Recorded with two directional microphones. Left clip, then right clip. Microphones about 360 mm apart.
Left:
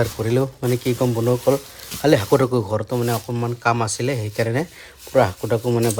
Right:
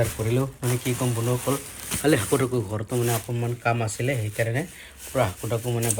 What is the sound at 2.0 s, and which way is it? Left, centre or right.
Speech, left.